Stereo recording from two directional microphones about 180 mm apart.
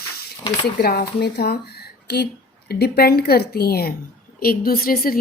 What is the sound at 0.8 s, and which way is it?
A woman's voice, 60° left (ahead or behind).